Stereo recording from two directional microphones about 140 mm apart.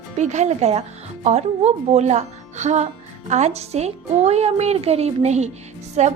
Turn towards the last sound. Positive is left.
turn(degrees=-55)  # may be behind; listen again after turning